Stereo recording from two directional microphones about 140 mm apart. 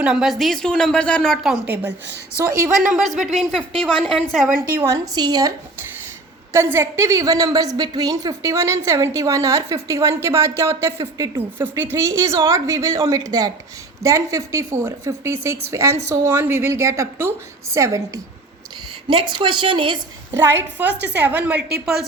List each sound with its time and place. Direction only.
0.0 s speech: 5° right (ahead or behind)
1.6 s a woman's voice: 15° right (ahead or behind)
3.4 s speech: 5° left (ahead or behind)
4.9 s a woman's voice: 30° right (ahead or behind)
19.0 s a woman's voice: 35° right (ahead or behind)
20.4 s a woman's voice: 15° right (ahead or behind)